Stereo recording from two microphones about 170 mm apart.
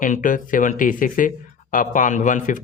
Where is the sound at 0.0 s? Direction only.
50° left (ahead or behind).